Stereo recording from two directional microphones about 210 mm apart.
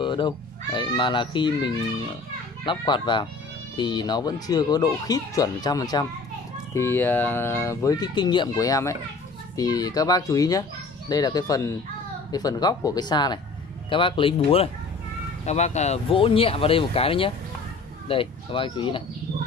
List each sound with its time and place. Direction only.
0.0 s cat: 20° left (ahead or behind)
0.7 s speech: 20° left (ahead or behind)